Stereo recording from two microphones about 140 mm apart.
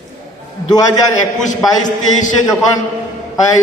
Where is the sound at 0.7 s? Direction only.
30° left (ahead or behind).